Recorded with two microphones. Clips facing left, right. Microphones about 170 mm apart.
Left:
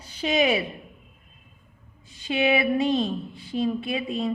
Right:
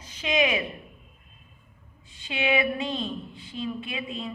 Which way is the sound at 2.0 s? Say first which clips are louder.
Left 5 dB; 40° left (ahead or behind).